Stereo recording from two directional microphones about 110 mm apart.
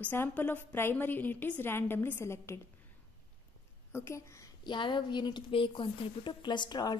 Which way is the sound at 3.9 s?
25° left (ahead or behind).